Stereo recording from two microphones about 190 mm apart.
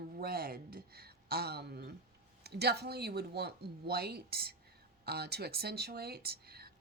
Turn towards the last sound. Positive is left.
turn(degrees=-55)  # may be behind; listen again after turning